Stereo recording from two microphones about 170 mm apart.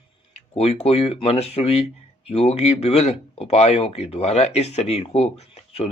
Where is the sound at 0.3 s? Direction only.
35° left (ahead or behind).